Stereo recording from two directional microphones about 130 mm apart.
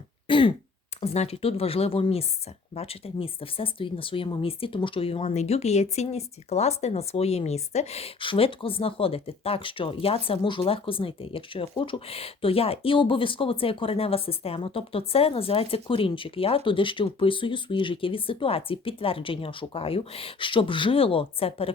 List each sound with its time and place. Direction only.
0.3 s throat clearing: 40° left (ahead or behind)
1.0 s speech: 55° left (ahead or behind)